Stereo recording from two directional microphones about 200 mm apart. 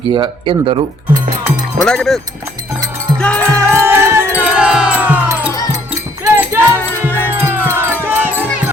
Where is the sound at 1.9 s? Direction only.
Centre (ahead or behind).